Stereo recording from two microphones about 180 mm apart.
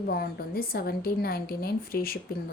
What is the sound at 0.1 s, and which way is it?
A woman's voice, 55° left (ahead or behind).